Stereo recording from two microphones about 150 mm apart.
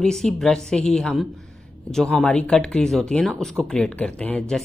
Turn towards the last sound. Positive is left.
turn(degrees=5)  # may be behind; listen again after turning